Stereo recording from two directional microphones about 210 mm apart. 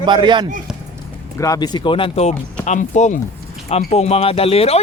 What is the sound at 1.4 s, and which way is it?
Speech, 15° left (ahead or behind).